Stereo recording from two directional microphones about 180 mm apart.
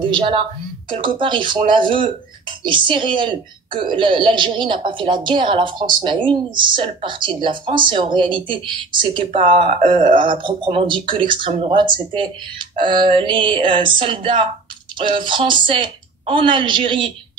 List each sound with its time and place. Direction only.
0.1 s speech: 30° right (ahead or behind)